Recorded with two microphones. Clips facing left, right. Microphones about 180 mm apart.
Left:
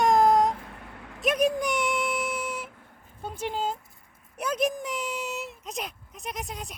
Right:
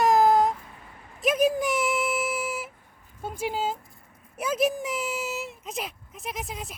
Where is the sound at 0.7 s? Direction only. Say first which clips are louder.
Left 4 dB; 65° left (ahead or behind).